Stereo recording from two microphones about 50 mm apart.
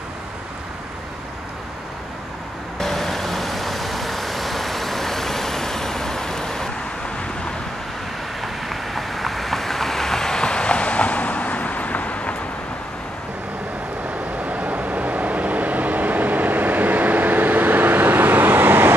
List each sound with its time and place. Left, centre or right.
2.8 s vehicle: centre
8.4 s vehicle: centre; by 12.4 s left
14.4 s vehicle: right